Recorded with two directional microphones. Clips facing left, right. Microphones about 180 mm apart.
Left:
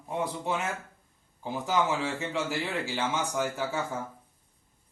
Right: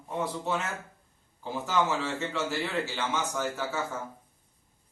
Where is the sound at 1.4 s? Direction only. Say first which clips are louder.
Even; 15° left (ahead or behind).